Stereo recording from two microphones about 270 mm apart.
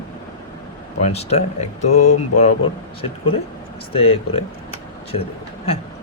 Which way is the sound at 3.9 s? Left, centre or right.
Left.